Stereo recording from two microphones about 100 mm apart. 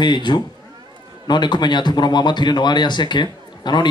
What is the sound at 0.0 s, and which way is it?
Speech, 50° left (ahead or behind).